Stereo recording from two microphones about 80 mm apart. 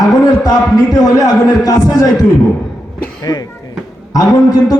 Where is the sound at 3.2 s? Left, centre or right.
Left.